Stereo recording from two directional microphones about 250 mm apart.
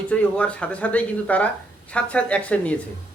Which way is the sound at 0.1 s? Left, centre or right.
Centre.